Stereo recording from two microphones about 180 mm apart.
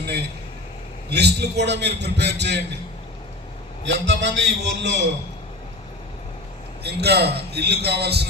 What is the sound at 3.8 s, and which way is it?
Speech, 85° right.